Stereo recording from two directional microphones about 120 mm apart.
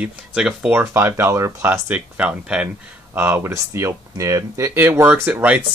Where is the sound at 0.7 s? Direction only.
15° right (ahead or behind).